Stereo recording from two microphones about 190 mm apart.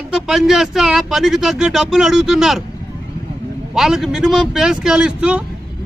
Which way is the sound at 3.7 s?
Centre (ahead or behind).